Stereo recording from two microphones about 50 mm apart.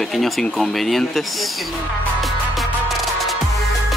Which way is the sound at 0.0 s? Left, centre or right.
Centre.